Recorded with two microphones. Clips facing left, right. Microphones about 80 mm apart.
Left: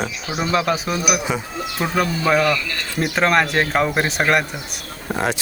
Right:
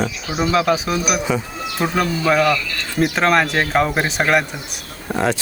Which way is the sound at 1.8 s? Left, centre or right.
Centre.